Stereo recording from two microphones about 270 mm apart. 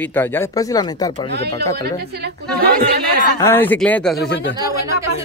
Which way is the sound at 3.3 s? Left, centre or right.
Centre.